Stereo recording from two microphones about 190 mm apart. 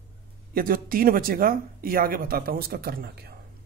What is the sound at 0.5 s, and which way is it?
Speech, 50° right (ahead or behind).